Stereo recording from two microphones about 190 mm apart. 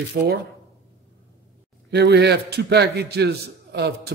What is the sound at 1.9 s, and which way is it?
A man's voice, 60° right (ahead or behind).